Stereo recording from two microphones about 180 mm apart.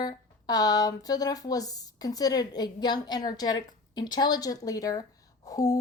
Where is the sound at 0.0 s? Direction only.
20° left (ahead or behind).